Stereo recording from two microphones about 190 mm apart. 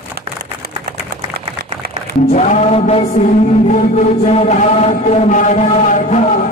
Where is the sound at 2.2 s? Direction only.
40° left (ahead or behind).